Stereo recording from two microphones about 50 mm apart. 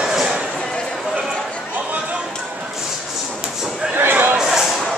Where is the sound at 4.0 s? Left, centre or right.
Right.